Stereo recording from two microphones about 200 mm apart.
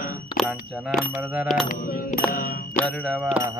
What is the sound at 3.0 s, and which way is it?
Bicycle bell, 5° right (ahead or behind).